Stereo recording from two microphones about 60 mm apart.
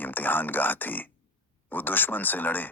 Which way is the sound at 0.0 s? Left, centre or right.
Left.